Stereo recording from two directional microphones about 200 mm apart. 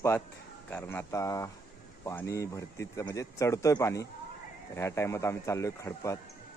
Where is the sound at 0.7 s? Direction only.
10° left (ahead or behind).